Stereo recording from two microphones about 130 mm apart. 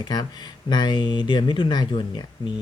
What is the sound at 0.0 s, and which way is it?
Speech, 30° left (ahead or behind).